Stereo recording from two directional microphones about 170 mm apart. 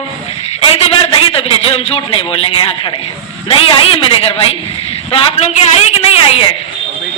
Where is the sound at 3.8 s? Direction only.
35° left (ahead or behind).